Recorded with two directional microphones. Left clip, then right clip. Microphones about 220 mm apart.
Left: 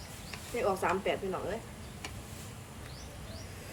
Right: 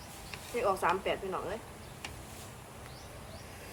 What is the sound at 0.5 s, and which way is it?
Speech, 10° right (ahead or behind).